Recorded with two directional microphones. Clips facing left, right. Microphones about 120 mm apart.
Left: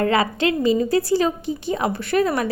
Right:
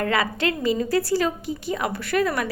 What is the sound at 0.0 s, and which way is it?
A woman's voice, 25° left (ahead or behind).